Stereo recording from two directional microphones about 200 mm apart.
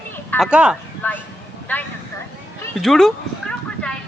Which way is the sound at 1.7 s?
10° left (ahead or behind).